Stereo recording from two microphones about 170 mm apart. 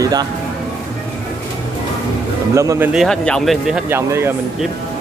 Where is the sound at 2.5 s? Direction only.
15° right (ahead or behind).